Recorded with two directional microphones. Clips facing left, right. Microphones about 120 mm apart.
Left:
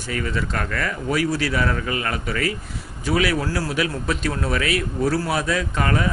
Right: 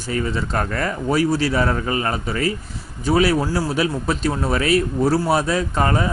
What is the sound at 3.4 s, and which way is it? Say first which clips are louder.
Speech: right 3 dB; 20° right (ahead or behind).